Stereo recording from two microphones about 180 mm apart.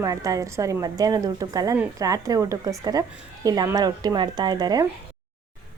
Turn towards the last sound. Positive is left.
turn(degrees=-20)  # may be behind; listen again after turning